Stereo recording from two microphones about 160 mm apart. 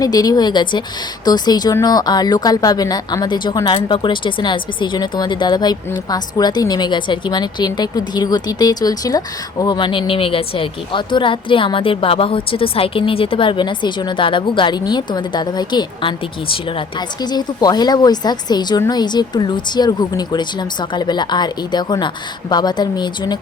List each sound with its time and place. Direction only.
0.0 s speech: 25° left (ahead or behind)